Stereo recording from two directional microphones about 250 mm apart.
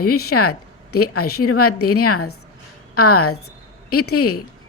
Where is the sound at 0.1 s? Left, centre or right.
Left.